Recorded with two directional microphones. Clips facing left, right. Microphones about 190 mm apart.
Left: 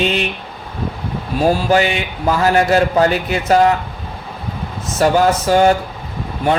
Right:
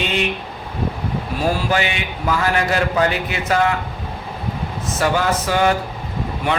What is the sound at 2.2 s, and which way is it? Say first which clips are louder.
A man's voice: left 5 dB; 35° left (ahead or behind).